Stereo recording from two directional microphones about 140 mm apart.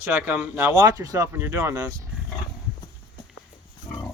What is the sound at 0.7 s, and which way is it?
Speech, 25° right (ahead or behind).